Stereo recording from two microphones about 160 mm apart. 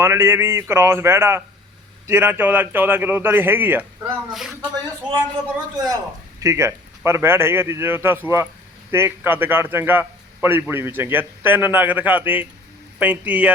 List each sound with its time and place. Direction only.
0.0 s a man's voice: 15° right (ahead or behind)
5.7 s a man's voice: 25° right (ahead or behind)